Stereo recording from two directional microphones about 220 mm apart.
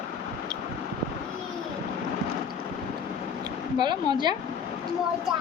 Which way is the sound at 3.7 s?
20° right (ahead or behind).